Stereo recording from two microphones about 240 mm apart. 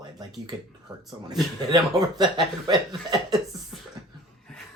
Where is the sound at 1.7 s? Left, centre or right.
Centre.